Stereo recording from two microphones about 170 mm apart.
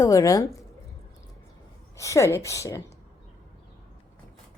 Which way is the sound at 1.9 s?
15° left (ahead or behind).